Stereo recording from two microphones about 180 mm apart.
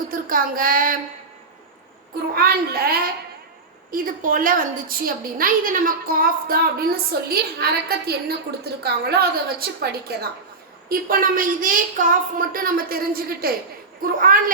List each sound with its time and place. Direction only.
0.1 s speech: 50° right (ahead or behind)
2.3 s a woman's voice: 55° right (ahead or behind)